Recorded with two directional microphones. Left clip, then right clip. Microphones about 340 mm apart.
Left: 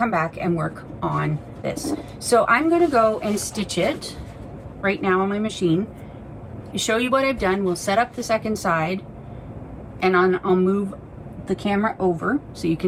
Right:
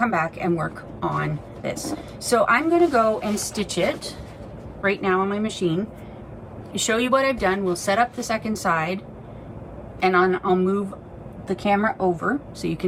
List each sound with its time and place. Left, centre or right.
0.0 s speech: centre